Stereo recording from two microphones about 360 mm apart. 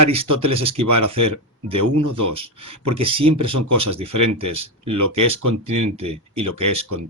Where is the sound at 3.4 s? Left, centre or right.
Right.